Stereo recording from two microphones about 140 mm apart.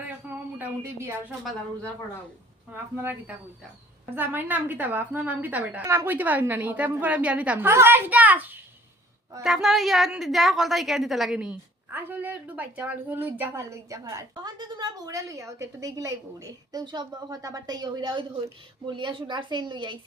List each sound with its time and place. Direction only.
0.3 s a sound: 15° right (ahead or behind)
2.6 s a woman's voice: 15° right (ahead or behind)
9.4 s a woman's voice: centre (ahead or behind); by 20.0 s 35° right (ahead or behind)